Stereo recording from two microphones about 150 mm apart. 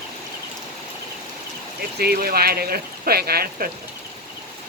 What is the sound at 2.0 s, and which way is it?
Speech, 90° right.